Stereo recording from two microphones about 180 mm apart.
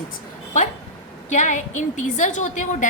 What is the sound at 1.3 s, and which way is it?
A woman's voice, 40° left (ahead or behind).